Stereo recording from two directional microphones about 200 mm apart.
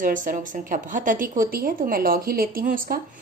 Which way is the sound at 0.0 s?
40° right (ahead or behind).